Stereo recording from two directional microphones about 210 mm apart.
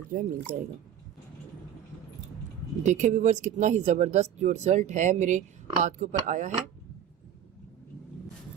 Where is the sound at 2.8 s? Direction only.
35° right (ahead or behind).